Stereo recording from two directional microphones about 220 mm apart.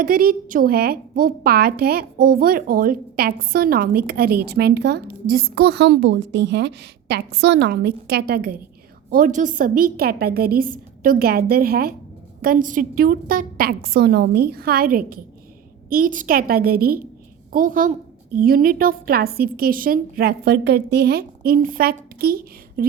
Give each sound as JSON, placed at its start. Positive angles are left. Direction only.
{"t": 0.0, "sound": "a woman's voice", "side_deg": -40}